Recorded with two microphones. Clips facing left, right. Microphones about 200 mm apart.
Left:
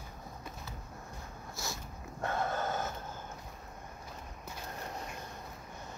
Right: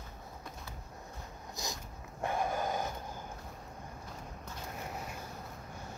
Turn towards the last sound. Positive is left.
turn(degrees=-5)  # may be behind; listen again after turning